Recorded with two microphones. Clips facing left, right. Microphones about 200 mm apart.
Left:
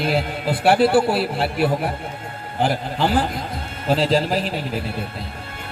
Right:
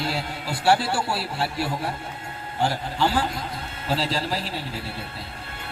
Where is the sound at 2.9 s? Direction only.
55° left (ahead or behind).